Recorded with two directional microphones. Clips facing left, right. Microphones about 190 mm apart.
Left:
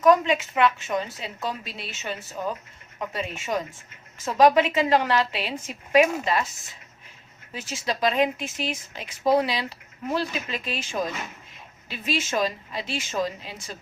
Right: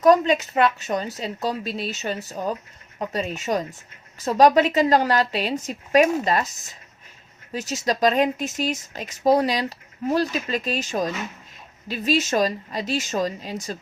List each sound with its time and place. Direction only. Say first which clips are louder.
0.0 s speech: right 3 dB; 40° right (ahead or behind)